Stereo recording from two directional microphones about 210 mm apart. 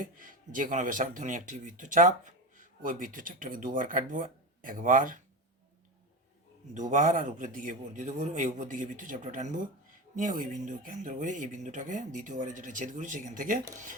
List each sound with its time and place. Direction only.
0.0 s speech: 40° right (ahead or behind)
6.7 s speech: 35° right (ahead or behind)